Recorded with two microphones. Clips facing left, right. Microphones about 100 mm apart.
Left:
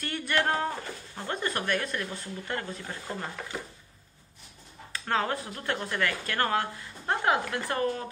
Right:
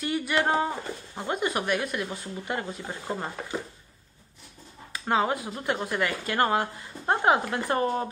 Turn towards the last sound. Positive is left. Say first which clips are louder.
# right 3 dB
turn(degrees=-25)  # may be behind; listen again after turning